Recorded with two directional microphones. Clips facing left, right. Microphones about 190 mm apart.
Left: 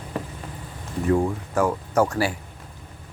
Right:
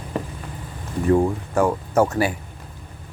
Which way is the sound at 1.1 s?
30° right (ahead or behind).